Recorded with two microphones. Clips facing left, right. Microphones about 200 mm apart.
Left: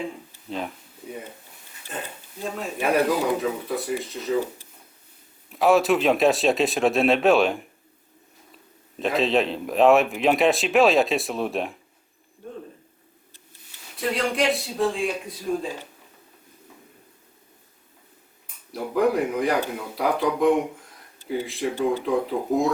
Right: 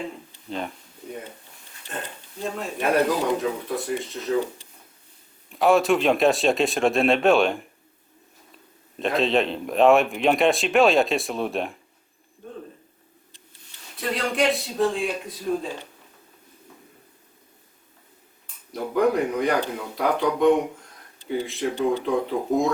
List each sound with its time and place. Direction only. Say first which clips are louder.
0.5 s a man's voice: even; centre (ahead or behind)
9.0 s a man's voice: even; centre (ahead or behind)
13.9 s a man's voice: left 1 dB; centre (ahead or behind)
18.7 s a man's voice: even; 5° left (ahead or behind)